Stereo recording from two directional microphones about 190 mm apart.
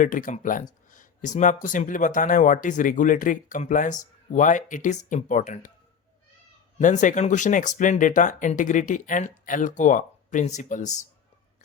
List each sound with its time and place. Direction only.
0.0 s speech: 45° left (ahead or behind)
6.7 s speech: 40° left (ahead or behind)